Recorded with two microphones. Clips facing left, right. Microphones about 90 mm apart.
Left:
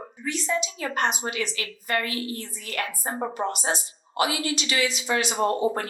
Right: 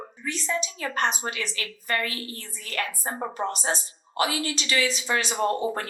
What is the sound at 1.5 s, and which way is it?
Speech, 35° right (ahead or behind).